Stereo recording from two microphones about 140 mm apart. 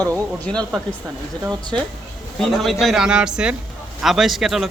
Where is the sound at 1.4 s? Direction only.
30° right (ahead or behind).